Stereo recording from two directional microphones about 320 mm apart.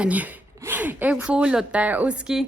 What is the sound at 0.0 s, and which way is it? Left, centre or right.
A woman's voice, centre.